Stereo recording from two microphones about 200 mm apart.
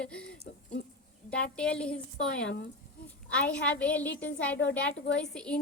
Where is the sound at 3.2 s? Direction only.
5° left (ahead or behind).